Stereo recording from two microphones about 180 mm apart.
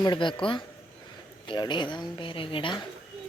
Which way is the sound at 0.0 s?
25° left (ahead or behind).